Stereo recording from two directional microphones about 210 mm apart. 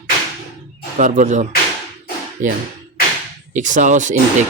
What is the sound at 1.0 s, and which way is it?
Speech, 35° right (ahead or behind).